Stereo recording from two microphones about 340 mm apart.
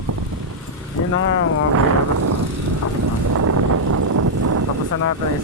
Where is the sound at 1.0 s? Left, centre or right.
Left.